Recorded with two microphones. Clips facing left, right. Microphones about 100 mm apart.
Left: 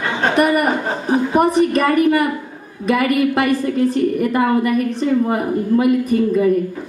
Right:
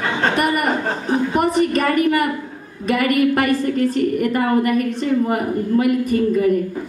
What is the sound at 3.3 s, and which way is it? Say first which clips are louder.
A woman's voice: left 1 dB; 15° left (ahead or behind).